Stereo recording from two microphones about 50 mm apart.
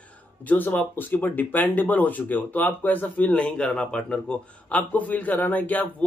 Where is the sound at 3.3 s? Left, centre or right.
Left.